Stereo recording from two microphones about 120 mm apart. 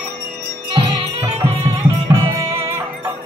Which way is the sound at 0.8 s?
40° right (ahead or behind).